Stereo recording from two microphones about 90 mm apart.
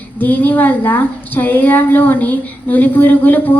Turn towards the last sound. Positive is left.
turn(degrees=20)  # may be behind; listen again after turning